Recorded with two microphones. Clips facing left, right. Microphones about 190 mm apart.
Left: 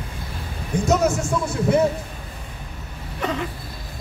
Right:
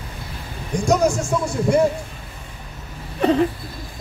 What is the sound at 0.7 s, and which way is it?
Speech, 5° left (ahead or behind).